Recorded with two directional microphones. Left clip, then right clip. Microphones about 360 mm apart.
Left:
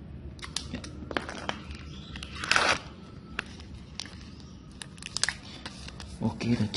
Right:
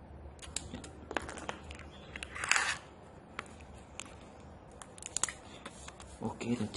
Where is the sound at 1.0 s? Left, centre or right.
Right.